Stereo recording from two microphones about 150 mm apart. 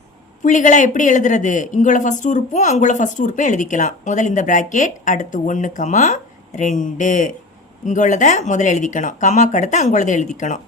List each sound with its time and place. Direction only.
0.4 s speech: 55° left (ahead or behind)